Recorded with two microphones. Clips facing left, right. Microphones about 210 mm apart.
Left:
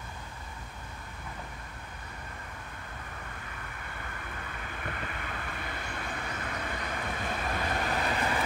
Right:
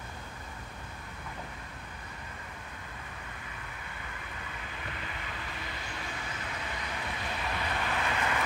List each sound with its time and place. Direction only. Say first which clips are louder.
4.8 s vehicle: left 5 dB; 50° left (ahead or behind); by 8.5 s 35° left (ahead or behind)